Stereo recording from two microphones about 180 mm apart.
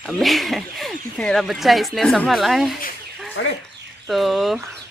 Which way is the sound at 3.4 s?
90° left.